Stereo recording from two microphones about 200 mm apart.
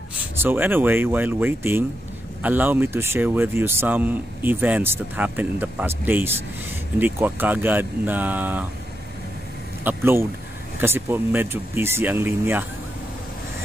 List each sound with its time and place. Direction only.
0.4 s speech: 10° right (ahead or behind)
9.8 s speech: 10° right (ahead or behind)